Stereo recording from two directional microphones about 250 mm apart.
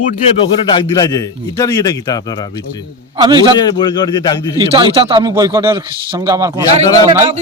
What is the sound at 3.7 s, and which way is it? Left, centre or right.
Speech, centre.